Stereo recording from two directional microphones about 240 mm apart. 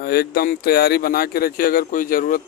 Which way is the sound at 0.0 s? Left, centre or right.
Left.